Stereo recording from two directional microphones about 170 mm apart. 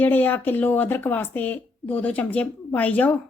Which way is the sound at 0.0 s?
10° left (ahead or behind).